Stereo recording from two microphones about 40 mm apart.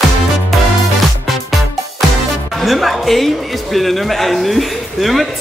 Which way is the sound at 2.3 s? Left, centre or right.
Centre.